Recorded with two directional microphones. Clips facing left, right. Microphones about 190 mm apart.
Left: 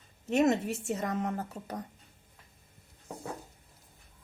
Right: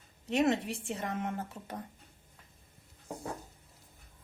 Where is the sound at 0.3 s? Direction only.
40° left (ahead or behind).